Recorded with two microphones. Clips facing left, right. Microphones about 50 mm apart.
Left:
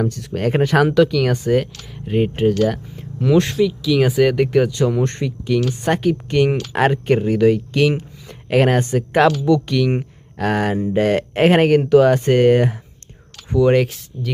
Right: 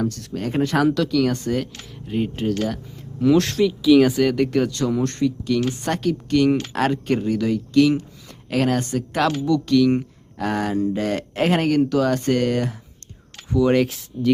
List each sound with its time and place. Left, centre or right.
0.3 s speech: left
0.9 s speech: centre
2.6 s speech: centre
5.0 s speech: left
7.3 s speech: left
7.9 s speech: left
10.3 s speech: left
10.6 s speech: left
13.6 s speech: centre